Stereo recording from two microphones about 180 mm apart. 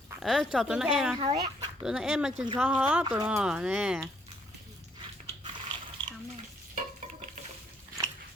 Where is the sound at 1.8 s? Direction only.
5° right (ahead or behind).